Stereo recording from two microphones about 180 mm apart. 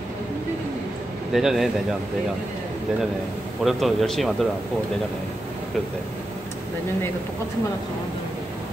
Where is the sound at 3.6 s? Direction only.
Centre (ahead or behind).